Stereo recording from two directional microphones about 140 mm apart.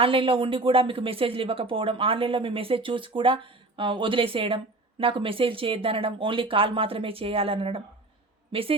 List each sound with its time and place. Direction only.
0.0 s speech: 40° right (ahead or behind)